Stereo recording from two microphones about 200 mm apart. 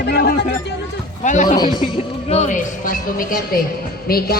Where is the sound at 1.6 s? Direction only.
25° left (ahead or behind).